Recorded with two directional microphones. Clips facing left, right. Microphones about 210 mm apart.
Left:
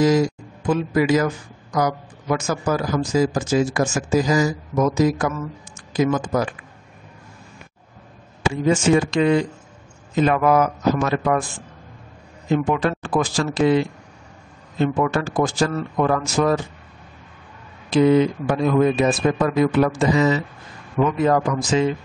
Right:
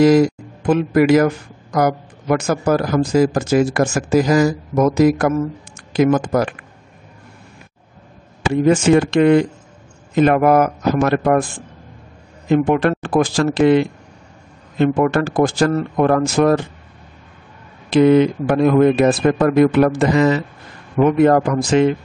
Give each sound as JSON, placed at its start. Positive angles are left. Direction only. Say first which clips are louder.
{"t": 0.0, "sound": "speech", "louder": "right 6 dB", "side_deg": -65}
{"t": 8.5, "sound": "speech", "louder": "right 5 dB", "side_deg": -65}
{"t": 12.4, "sound": "speech", "louder": "right 5 dB", "side_deg": -55}
{"t": 17.8, "sound": "speech", "louder": "right 4 dB", "side_deg": -65}